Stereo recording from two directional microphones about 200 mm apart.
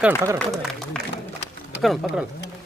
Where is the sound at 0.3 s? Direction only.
Centre (ahead or behind).